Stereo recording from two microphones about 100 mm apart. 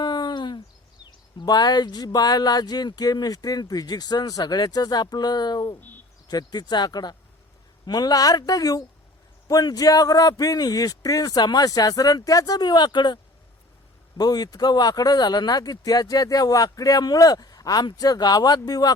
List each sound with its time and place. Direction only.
0.0 s a sound: 45° left (ahead or behind)
1.4 s speech: 45° left (ahead or behind)
14.2 s speech: 40° left (ahead or behind)